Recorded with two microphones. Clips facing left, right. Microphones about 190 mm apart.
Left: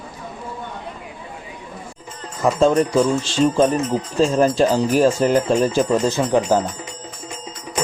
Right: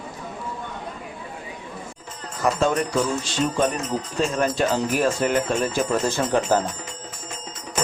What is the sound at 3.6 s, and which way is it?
Speech, 30° left (ahead or behind).